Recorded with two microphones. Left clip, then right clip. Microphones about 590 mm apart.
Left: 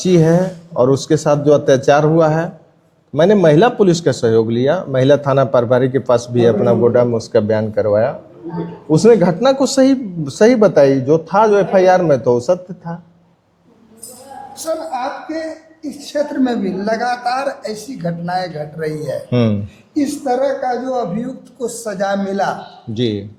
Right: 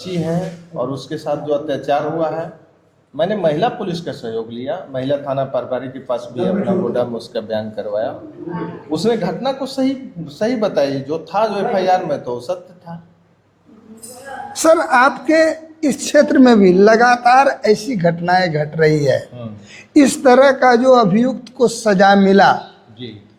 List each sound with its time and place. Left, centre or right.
0.0 s a man's voice: left
14.5 s a woman's voice: right
20.0 s speech: right